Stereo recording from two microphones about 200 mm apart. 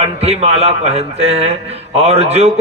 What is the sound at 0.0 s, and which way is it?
A man's voice, 30° right (ahead or behind).